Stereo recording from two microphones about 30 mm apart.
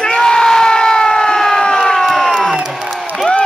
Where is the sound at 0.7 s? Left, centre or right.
Left.